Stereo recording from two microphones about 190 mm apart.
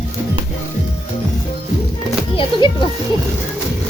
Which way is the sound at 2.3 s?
30° left (ahead or behind).